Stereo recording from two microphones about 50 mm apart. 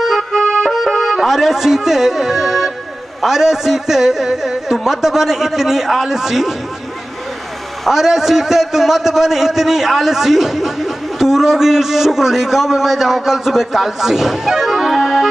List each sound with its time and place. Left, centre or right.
0.0 s accordion: centre
0.4 s music: centre
0.7 s a man's voice: centre
7.8 s a man's voice: centre